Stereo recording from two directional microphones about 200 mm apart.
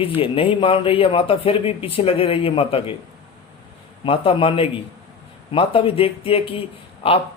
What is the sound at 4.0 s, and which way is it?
A man's voice, 25° left (ahead or behind).